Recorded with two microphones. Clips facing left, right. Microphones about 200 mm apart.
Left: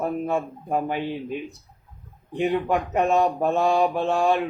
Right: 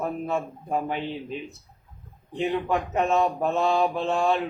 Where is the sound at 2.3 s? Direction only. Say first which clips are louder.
Left 3 dB; 15° left (ahead or behind).